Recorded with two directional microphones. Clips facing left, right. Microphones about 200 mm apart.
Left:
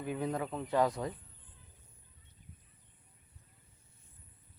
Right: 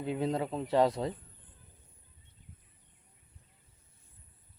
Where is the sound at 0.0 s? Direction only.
25° right (ahead or behind).